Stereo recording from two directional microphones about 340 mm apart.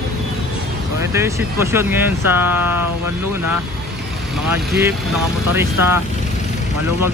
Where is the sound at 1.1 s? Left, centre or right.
Centre.